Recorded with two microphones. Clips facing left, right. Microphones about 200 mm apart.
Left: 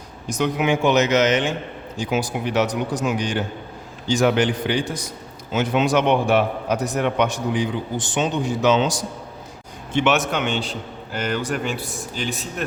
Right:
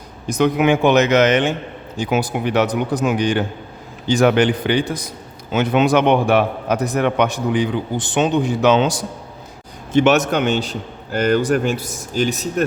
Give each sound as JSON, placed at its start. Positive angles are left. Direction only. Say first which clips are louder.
{"t": 0.3, "sound": "a man's voice", "louder": "right 5 dB", "side_deg": -60}
{"t": 9.9, "sound": "a man's voice", "louder": "right 5 dB", "side_deg": -40}